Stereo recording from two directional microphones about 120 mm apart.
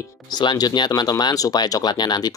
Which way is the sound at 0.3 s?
35° left (ahead or behind).